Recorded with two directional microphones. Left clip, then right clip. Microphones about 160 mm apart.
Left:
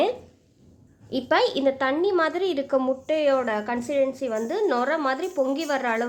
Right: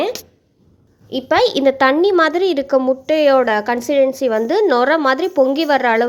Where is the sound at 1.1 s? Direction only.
20° right (ahead or behind).